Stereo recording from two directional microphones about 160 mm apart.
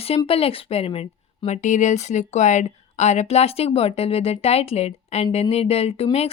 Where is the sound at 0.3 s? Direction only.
35° left (ahead or behind).